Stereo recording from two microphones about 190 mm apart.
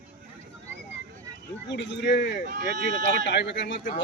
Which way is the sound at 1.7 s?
70° left (ahead or behind).